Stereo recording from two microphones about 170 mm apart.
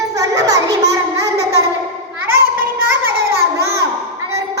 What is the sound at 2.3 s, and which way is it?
Child singing, 15° right (ahead or behind).